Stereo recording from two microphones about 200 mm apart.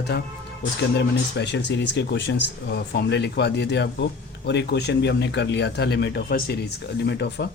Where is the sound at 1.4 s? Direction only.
60° left (ahead or behind).